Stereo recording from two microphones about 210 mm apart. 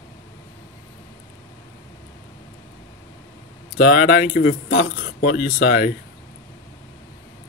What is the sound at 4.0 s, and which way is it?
Speech, 40° left (ahead or behind).